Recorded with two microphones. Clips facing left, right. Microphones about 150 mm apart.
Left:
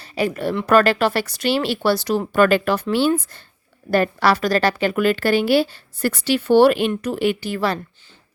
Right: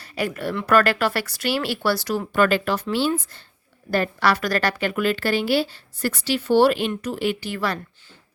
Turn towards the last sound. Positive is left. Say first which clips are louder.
# left 4 dB
turn(degrees=30)  # may be behind; listen again after turning